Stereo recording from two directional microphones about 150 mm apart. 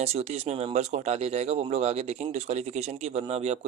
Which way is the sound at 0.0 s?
45° right (ahead or behind).